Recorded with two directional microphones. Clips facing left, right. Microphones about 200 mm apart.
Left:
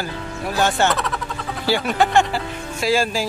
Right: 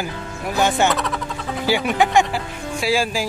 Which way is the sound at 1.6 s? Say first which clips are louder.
Even; 10° right (ahead or behind).